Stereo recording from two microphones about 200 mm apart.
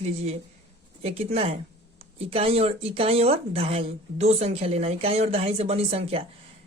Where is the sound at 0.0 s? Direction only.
30° right (ahead or behind).